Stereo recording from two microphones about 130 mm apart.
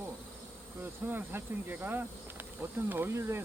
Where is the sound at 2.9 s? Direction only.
15° right (ahead or behind).